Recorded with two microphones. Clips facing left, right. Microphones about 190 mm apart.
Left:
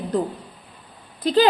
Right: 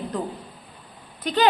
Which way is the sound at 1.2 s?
30° left (ahead or behind).